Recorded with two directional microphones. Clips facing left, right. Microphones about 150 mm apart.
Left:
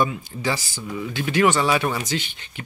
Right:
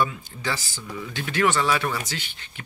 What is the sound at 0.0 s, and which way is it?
Speech, 15° left (ahead or behind).